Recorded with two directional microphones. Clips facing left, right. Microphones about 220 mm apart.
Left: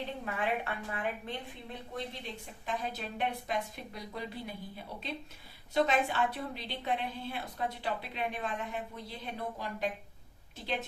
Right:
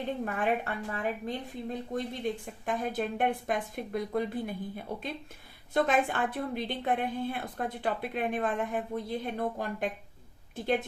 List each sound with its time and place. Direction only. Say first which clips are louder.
0.3 s a woman's voice: right 1 dB; 45° right (ahead or behind)